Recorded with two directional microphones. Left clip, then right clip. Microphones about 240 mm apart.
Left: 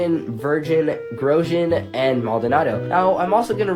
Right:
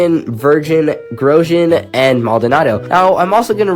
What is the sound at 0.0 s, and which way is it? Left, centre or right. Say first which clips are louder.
Speech: right 9 dB; right.